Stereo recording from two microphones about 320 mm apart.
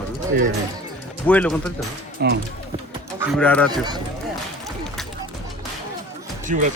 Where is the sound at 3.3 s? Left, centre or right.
Centre.